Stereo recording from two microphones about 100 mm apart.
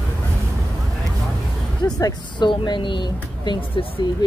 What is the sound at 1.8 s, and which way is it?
Speech, 40° left (ahead or behind).